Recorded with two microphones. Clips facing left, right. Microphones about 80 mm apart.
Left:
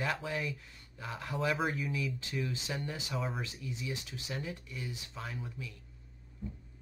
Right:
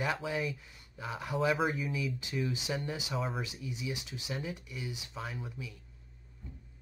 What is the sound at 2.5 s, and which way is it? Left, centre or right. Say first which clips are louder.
Speech: right 3 dB; centre.